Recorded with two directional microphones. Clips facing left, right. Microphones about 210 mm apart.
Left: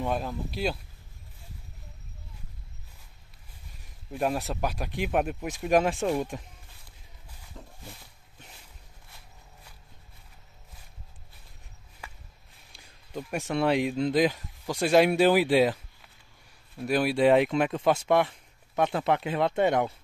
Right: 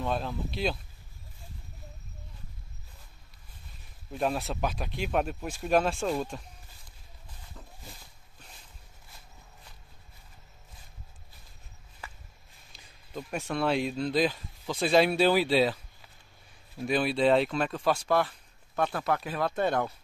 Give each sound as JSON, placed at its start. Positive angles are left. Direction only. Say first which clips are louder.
{"t": 0.0, "sound": "speech", "louder": "left 1 dB", "side_deg": 10}
{"t": 4.1, "sound": "speech", "louder": "left 1 dB", "side_deg": 10}
{"t": 7.5, "sound": "a sound", "louder": "left 4 dB", "side_deg": 20}
{"t": 12.7, "sound": "speech", "louder": "left 2 dB", "side_deg": 15}